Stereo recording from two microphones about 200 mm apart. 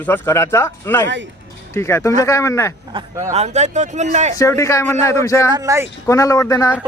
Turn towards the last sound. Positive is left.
turn(degrees=15)  # may be behind; listen again after turning